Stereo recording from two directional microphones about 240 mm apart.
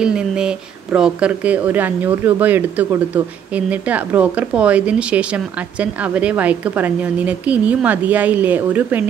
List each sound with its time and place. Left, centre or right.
0.0 s a woman's voice: centre